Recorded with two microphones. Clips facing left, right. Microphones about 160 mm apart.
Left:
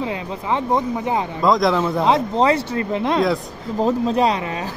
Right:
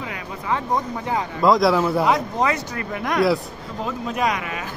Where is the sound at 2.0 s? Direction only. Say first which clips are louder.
Left 4 dB; 25° left (ahead or behind).